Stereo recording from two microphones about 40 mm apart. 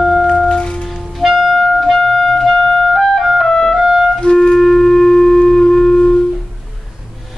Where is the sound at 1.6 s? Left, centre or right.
Centre.